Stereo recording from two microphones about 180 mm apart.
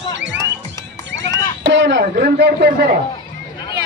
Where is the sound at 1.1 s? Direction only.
85° right.